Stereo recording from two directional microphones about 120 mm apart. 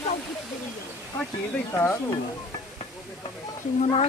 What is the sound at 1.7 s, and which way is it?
Speech, 20° left (ahead or behind).